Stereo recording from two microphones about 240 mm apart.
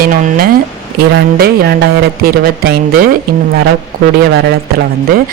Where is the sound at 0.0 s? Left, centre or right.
Right.